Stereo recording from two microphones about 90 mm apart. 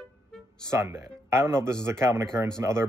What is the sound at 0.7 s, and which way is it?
A man's voice, 30° right (ahead or behind).